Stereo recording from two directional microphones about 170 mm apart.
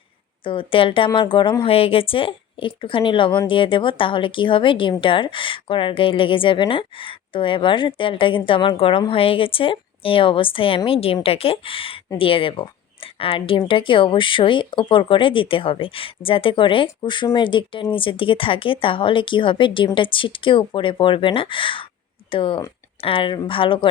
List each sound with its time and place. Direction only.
0.4 s speech: 30° left (ahead or behind)